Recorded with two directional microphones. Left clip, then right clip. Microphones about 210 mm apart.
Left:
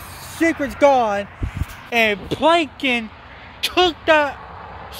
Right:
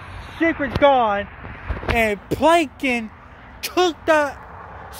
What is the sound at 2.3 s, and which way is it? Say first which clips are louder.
Speech: right 3 dB; 20° right (ahead or behind).